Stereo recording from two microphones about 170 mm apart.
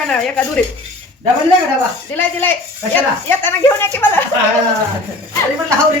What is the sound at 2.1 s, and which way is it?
Speech, 10° left (ahead or behind).